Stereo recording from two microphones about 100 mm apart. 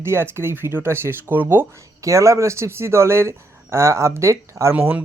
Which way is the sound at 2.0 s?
30° right (ahead or behind).